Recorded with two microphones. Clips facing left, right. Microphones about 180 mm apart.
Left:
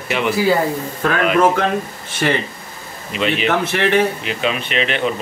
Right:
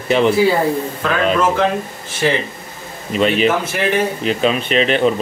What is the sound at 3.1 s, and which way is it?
Speech, 40° right (ahead or behind).